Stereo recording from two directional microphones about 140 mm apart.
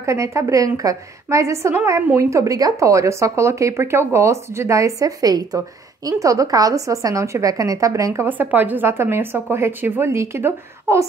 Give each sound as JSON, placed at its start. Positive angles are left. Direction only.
{"t": 0.0, "sound": "a woman's voice", "side_deg": -20}